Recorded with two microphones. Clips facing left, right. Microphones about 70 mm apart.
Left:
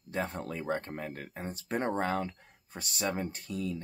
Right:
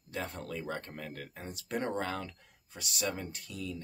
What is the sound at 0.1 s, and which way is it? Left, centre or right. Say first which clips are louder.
Speech: left 4 dB; left.